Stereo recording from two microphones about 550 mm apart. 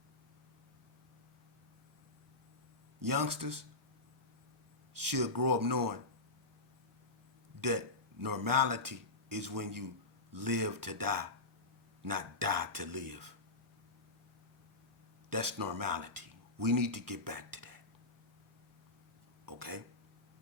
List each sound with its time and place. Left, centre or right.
3.0 s speech: right
4.9 s speech: right
7.6 s a man's voice: right
15.3 s speech: right
19.5 s speech: right